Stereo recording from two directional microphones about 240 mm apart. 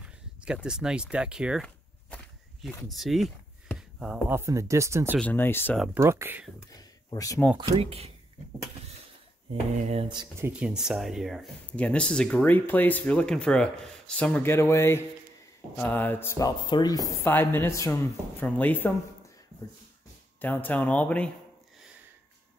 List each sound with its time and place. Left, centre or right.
0.0 s speech: centre
5.2 s speech: centre
5.9 s speech: centre
6.7 s a sound: centre
7.5 s speech: right
9.5 s speech: right
10.5 s speech: centre
20.3 s speech: centre